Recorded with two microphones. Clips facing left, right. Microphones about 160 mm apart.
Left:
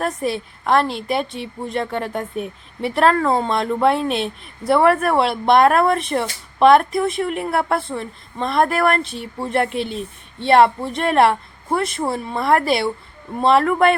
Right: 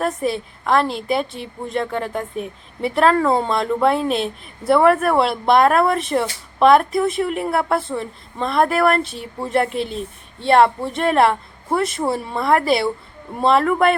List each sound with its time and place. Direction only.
0.0 s a woman's voice: centre (ahead or behind)